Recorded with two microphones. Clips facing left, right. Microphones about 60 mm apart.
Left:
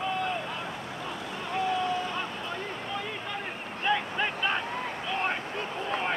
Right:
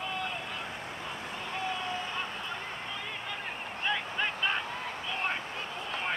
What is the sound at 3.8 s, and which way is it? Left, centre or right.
Vehicle, centre.